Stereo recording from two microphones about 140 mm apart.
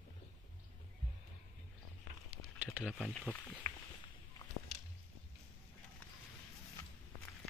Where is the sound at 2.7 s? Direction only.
Centre (ahead or behind).